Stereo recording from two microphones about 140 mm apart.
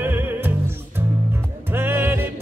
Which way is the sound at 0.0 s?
15° right (ahead or behind).